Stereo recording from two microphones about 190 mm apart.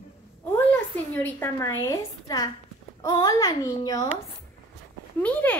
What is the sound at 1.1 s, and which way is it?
A woman's voice, 15° left (ahead or behind).